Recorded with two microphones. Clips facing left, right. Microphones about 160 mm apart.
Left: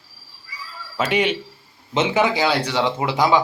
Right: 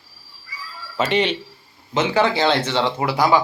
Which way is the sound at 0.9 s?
10° left (ahead or behind).